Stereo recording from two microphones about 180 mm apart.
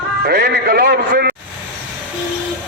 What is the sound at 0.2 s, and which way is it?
A man's voice, 60° right (ahead or behind).